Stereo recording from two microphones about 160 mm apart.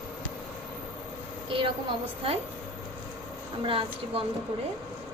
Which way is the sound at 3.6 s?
35° right (ahead or behind).